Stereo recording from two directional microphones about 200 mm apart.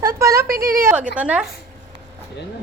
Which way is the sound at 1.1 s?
5° right (ahead or behind).